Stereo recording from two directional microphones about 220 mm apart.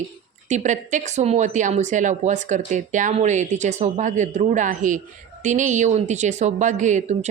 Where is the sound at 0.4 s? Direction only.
35° right (ahead or behind).